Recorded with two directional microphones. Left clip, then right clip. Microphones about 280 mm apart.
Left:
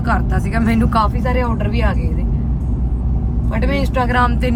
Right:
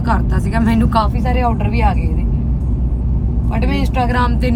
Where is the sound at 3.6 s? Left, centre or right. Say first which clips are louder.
Even; centre.